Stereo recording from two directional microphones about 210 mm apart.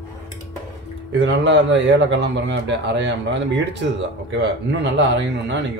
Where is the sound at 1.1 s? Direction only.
60° right (ahead or behind).